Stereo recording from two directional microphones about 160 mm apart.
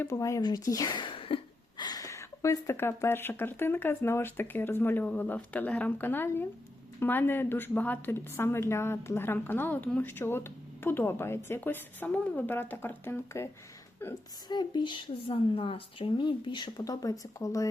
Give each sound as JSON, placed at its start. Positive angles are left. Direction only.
{"t": 0.0, "sound": "speech", "side_deg": 20}
{"t": 1.8, "sound": "a woman's voice", "side_deg": 25}
{"t": 14.4, "sound": "speech", "side_deg": 25}